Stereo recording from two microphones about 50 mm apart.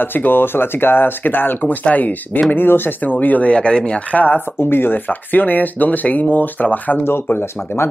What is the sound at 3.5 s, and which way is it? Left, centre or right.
Speech, left.